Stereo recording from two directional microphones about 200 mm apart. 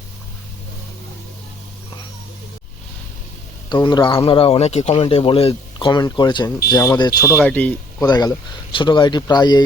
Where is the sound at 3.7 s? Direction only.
25° left (ahead or behind).